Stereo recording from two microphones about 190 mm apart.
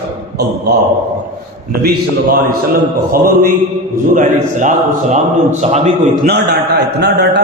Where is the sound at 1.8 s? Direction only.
55° right (ahead or behind); by 5.9 s 40° right (ahead or behind).